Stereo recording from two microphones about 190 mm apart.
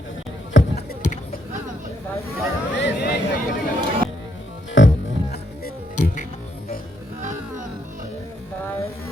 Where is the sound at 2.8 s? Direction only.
60° left (ahead or behind).